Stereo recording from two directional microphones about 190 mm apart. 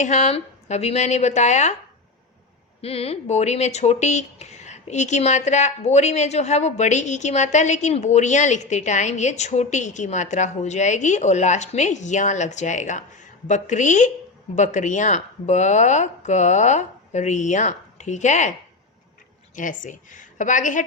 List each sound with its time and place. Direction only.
0.0 s speech: 35° left (ahead or behind)
2.8 s speech: 30° left (ahead or behind)
19.5 s a woman's voice: 40° left (ahead or behind)